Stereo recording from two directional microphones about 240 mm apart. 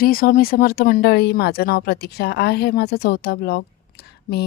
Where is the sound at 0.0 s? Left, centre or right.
Left.